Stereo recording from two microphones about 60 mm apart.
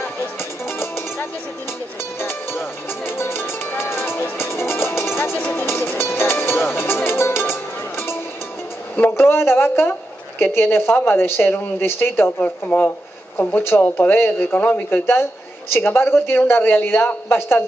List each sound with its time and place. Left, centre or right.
0.4 s music: left
9.1 s a man's voice: left
12.4 s a man's voice: left
14.6 s speech: left
14.9 s a man's voice: left